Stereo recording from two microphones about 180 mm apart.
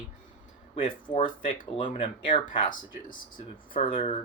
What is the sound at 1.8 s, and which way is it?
Speech, 30° left (ahead or behind).